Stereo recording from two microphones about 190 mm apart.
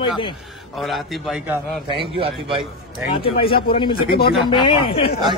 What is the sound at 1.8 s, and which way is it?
Speech, 30° right (ahead or behind).